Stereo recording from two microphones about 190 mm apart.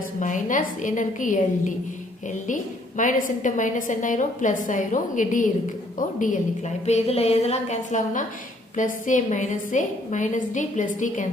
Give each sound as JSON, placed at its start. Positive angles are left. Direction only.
{"t": 0.2, "sound": "a woman's voice", "side_deg": 40}
{"t": 3.0, "sound": "a woman's voice", "side_deg": 40}